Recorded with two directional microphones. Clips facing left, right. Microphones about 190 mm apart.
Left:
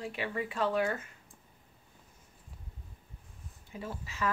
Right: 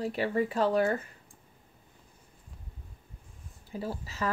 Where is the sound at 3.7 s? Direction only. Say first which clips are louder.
Right 5 dB; 35° right (ahead or behind).